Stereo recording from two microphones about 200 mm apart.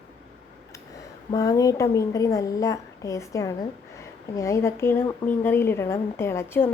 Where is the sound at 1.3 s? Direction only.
15° left (ahead or behind).